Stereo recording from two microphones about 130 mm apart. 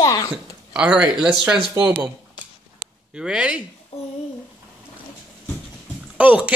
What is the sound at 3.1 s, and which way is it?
Speech, 5° right (ahead or behind).